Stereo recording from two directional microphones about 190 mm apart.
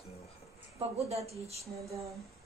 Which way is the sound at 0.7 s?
35° right (ahead or behind).